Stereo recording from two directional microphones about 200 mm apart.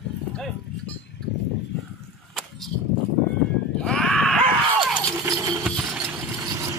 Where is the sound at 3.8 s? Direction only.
5° left (ahead or behind).